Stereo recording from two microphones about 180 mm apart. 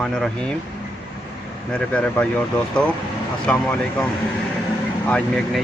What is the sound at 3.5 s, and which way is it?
Speech, 5° left (ahead or behind).